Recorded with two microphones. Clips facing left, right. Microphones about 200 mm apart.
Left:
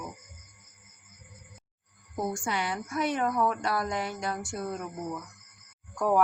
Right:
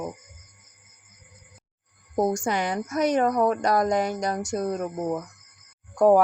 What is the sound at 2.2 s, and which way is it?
A woman's voice, 45° right (ahead or behind).